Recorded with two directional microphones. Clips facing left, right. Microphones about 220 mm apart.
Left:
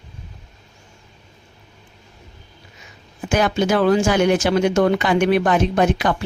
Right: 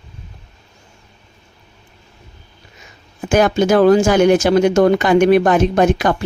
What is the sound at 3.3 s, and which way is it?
Speech, 45° right (ahead or behind).